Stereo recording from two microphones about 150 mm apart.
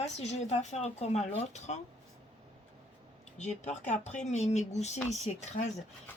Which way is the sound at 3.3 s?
50° left (ahead or behind).